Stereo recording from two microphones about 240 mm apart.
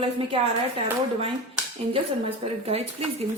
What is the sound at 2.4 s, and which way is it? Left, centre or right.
Speech, right.